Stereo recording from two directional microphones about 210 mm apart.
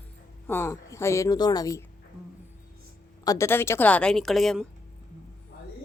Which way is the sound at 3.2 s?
15° left (ahead or behind).